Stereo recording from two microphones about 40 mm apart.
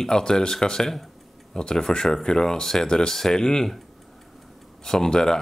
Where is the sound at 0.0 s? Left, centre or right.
Centre.